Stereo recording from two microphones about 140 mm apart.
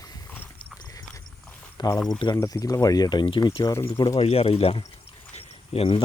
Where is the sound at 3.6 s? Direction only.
20° left (ahead or behind).